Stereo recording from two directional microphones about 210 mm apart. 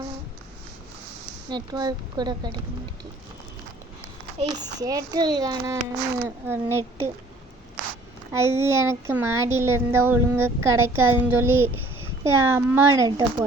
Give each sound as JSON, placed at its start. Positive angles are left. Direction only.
{"t": 1.5, "sound": "a woman's voice", "side_deg": -20}
{"t": 4.4, "sound": "a child's voice", "side_deg": -20}
{"t": 8.3, "sound": "a child's voice", "side_deg": -10}